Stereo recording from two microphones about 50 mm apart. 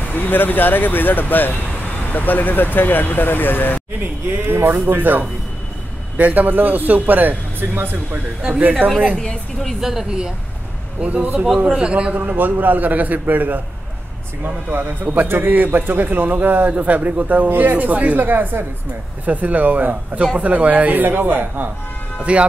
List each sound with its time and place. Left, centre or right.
0.1 s speech: left
4.0 s a man's voice: right
8.5 s a man's voice: right
9.1 s a woman's voice: centre
9.8 s speech: centre
11.0 s a man's voice: right
12.2 s a man's voice: right
22.2 s a man's voice: right